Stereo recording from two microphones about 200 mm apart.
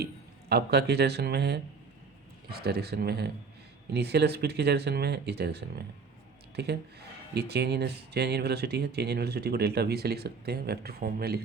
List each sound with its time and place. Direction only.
0.0 s speech: 55° right (ahead or behind)